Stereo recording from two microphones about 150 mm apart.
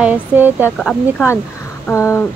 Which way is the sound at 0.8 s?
Centre (ahead or behind).